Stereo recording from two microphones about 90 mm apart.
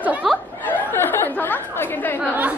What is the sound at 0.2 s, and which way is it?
Snicker, centre (ahead or behind).